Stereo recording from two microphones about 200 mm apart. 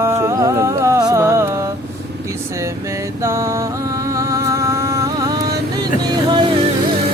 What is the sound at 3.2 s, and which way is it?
Music, 15° right (ahead or behind).